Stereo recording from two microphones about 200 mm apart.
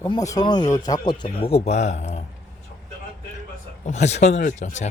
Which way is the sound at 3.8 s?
35° left (ahead or behind).